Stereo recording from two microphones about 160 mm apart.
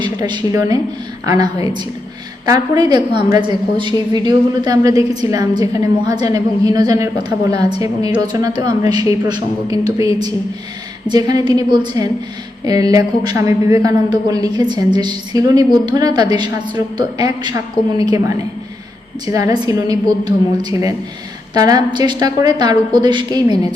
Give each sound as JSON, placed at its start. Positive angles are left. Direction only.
{"t": 0.0, "sound": "a woman's voice", "side_deg": -25}
{"t": 2.5, "sound": "a woman's voice", "side_deg": -25}
{"t": 19.2, "sound": "a woman's voice", "side_deg": -20}